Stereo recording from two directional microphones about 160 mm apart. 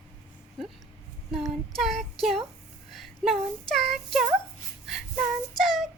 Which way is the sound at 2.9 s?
Centre (ahead or behind).